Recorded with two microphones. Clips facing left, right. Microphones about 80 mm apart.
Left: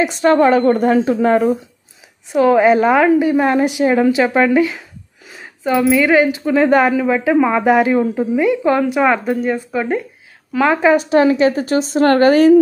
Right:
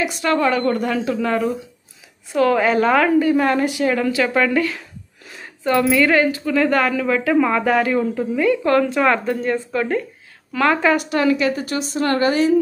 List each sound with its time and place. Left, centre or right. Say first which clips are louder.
0.0 s a woman's voice: left 6 dB; left
2.3 s speech: left 5 dB; centre
6.4 s speech: left 5 dB; left
11.9 s a woman's voice: left 7 dB; left